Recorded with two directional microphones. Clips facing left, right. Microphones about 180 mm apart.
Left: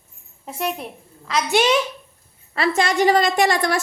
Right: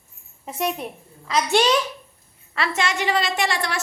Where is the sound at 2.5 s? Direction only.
40° left (ahead or behind).